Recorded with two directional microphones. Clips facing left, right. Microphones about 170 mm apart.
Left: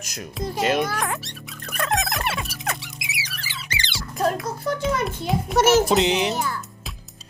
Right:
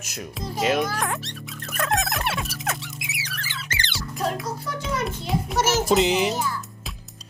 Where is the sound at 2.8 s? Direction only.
10° left (ahead or behind).